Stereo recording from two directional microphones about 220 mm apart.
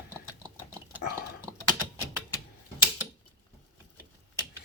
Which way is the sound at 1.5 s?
15° right (ahead or behind).